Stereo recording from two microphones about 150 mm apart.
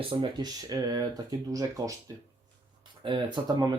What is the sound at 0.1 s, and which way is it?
Speech, 30° right (ahead or behind).